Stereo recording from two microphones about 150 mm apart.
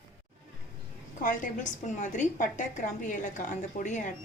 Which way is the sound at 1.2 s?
60° left (ahead or behind).